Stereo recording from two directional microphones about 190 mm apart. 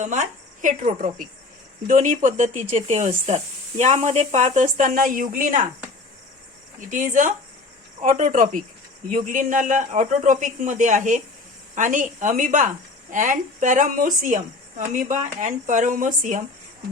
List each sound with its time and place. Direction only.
0.0 s speech: 40° right (ahead or behind)
6.7 s a woman's voice: 45° right (ahead or behind)